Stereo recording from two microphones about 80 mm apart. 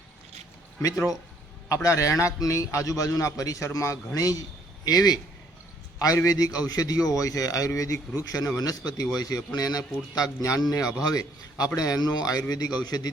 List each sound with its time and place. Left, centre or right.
0.8 s a man's voice: left
8.8 s a man's voice: left